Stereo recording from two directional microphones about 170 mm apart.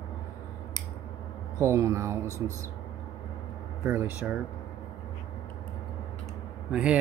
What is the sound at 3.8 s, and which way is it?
Speech, 15° right (ahead or behind).